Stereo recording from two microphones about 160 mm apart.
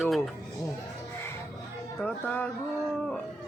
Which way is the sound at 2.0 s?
10° left (ahead or behind).